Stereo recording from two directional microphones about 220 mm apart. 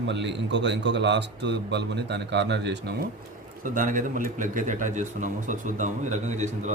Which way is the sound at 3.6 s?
40° right (ahead or behind).